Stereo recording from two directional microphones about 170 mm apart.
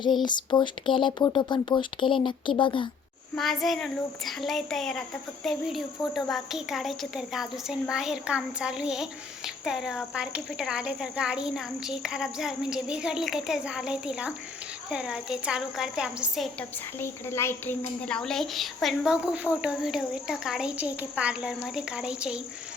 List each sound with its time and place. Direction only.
0.3 s speech: 25° left (ahead or behind)
3.3 s speech: centre (ahead or behind)
17.0 s speech: 15° left (ahead or behind); by 22.4 s 5° right (ahead or behind)